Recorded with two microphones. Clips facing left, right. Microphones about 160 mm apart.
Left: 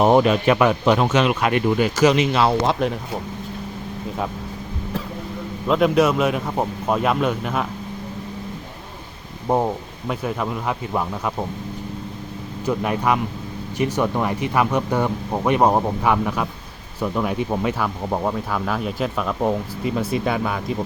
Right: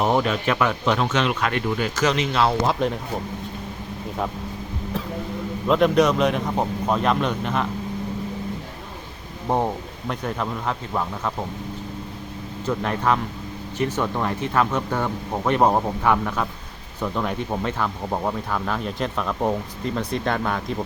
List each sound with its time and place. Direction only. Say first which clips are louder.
0.0 s speech: left 6 dB; 20° left (ahead or behind); by 2.9 s 5° left (ahead or behind)
5.6 s a man's voice: left 1 dB; centre (ahead or behind)
10.1 s speech: left 2 dB; 5° left (ahead or behind)
12.6 s a man's voice: left 2 dB; 10° left (ahead or behind)